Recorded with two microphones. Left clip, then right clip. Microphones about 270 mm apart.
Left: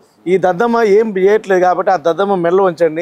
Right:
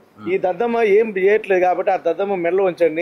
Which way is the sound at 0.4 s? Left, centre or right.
Left.